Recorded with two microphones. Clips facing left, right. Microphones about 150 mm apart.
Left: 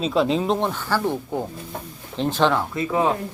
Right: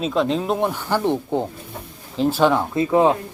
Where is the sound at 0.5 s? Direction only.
10° right (ahead or behind).